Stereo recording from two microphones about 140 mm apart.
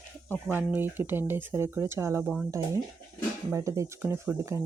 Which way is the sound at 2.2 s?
5° right (ahead or behind).